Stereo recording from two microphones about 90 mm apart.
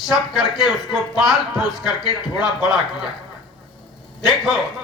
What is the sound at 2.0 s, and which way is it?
Speech, 50° left (ahead or behind).